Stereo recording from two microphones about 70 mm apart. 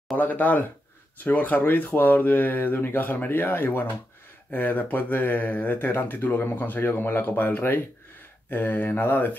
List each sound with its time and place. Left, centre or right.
0.2 s speech: left